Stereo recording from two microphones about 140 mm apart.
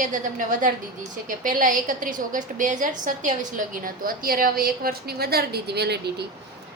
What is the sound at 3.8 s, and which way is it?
A woman's voice, 90° right.